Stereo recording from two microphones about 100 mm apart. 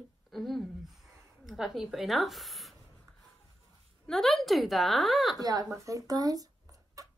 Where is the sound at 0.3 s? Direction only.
Centre (ahead or behind).